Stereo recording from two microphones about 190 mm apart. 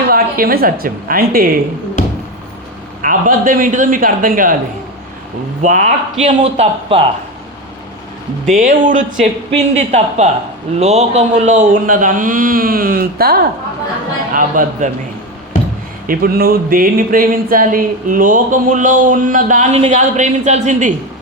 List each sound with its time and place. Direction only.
0.1 s speech: 50° right (ahead or behind)
3.0 s speech: 45° right (ahead or behind)
5.6 s speech: 40° right (ahead or behind)
8.5 s speech: 45° right (ahead or behind)
16.0 s speech: 50° right (ahead or behind)